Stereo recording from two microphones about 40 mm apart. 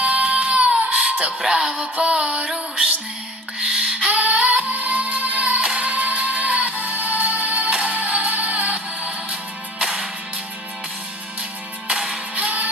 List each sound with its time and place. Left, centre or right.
0.0 s music: right
1.5 s music: centre
1.7 s music: right
3.8 s music: right
12.4 s music: right